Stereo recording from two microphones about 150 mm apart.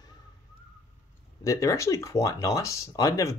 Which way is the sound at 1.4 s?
20° left (ahead or behind).